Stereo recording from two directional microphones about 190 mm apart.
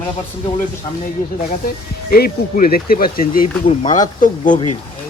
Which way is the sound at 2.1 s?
55° left (ahead or behind).